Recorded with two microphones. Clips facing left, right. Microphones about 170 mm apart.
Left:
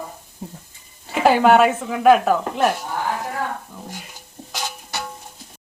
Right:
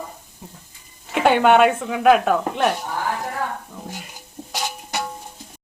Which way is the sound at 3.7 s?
Centre (ahead or behind).